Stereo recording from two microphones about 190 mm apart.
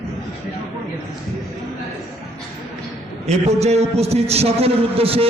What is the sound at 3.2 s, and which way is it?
A man's voice, 35° right (ahead or behind).